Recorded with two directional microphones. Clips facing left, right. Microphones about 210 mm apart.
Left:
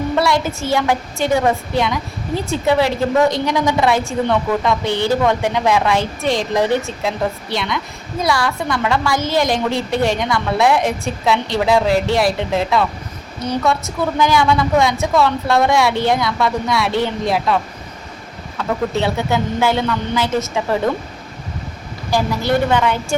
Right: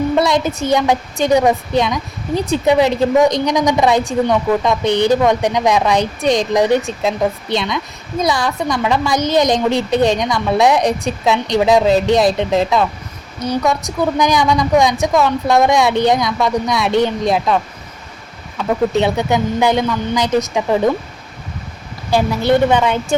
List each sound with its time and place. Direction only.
0.2 s a woman's voice: 20° right (ahead or behind)
22.1 s a woman's voice: 20° right (ahead or behind)